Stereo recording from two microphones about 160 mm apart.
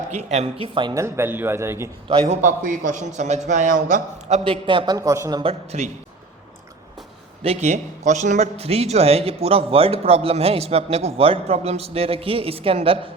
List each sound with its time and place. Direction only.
0.1 s a man's voice: 45° right (ahead or behind); by 1.0 s 30° right (ahead or behind)
1.0 s a man's voice: 15° right (ahead or behind)
2.2 s a man's voice: 50° right (ahead or behind)
4.4 s a man's voice: 35° right (ahead or behind)
4.9 s speech: 20° right (ahead or behind)
5.4 s a man's voice: 40° right (ahead or behind)
7.4 s a man's voice: 45° right (ahead or behind)